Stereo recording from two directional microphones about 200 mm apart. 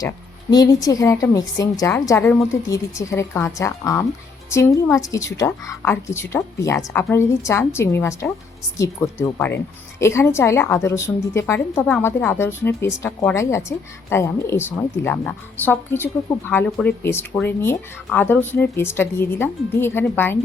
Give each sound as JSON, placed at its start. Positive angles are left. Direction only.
{"t": 0.5, "sound": "speech", "side_deg": 20}